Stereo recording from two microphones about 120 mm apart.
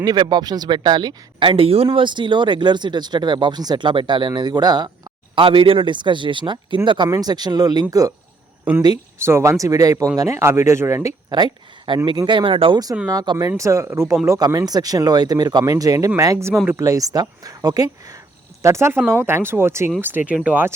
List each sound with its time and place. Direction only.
0.0 s speech: 35° right (ahead or behind)
9.1 s speech: 20° right (ahead or behind)
11.3 s speech: 35° right (ahead or behind)
13.1 s speech: 30° right (ahead or behind); by 20.7 s 15° right (ahead or behind)